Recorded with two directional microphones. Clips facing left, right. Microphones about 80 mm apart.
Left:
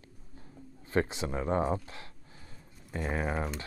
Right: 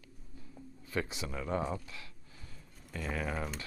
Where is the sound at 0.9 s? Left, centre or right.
Left.